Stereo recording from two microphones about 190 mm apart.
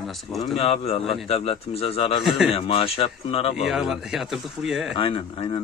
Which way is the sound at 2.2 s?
Centre (ahead or behind).